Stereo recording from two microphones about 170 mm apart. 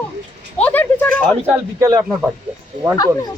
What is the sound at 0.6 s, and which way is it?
Speech, 10° left (ahead or behind).